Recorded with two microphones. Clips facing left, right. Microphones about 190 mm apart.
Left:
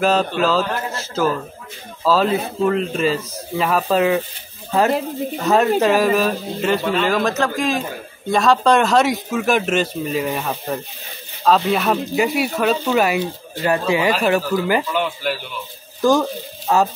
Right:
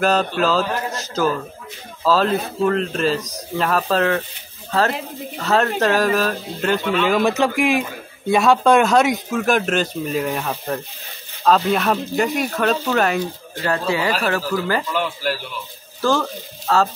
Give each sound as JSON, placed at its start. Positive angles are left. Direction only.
{"t": 0.0, "sound": "speech", "side_deg": 0}
{"t": 3.2, "sound": "speech", "side_deg": -15}
{"t": 3.5, "sound": "speech", "side_deg": 5}
{"t": 5.6, "sound": "speech", "side_deg": 5}
{"t": 7.2, "sound": "speech", "side_deg": -15}
{"t": 8.3, "sound": "speech", "side_deg": 0}
{"t": 14.9, "sound": "speech", "side_deg": 0}
{"t": 16.0, "sound": "speech", "side_deg": 15}